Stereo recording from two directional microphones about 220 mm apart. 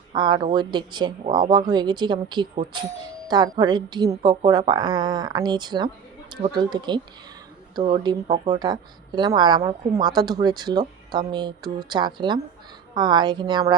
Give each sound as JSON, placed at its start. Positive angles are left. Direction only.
{"t": 0.1, "sound": "speech", "side_deg": -20}